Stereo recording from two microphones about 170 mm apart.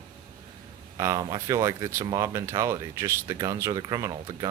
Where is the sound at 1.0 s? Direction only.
20° right (ahead or behind).